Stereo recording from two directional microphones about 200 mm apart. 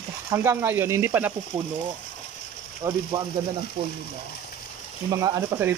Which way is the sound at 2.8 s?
15° right (ahead or behind).